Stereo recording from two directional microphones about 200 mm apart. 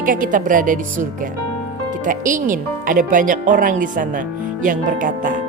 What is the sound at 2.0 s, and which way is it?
Speech, 40° right (ahead or behind).